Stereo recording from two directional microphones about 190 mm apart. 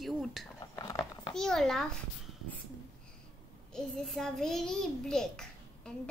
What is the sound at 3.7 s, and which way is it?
A child's voice, centre (ahead or behind).